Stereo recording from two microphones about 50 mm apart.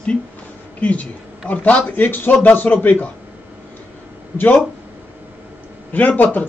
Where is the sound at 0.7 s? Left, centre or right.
Left.